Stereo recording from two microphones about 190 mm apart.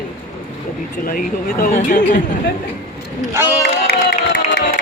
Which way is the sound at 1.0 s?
50° left (ahead or behind).